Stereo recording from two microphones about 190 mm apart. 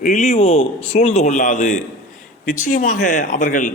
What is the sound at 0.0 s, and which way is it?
A man's voice, 35° left (ahead or behind).